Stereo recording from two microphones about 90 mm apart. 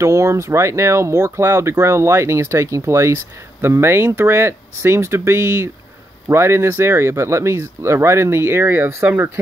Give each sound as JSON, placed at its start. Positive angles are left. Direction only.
{"t": 0.0, "sound": "speech", "side_deg": -35}